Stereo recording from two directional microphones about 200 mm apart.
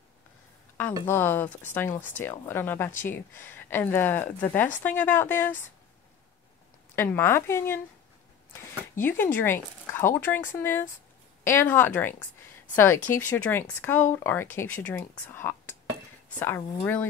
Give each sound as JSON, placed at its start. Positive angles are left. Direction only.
{"t": 1.0, "sound": "speech", "side_deg": 10}
{"t": 7.0, "sound": "speech", "side_deg": 10}
{"t": 9.0, "sound": "a woman's voice", "side_deg": 10}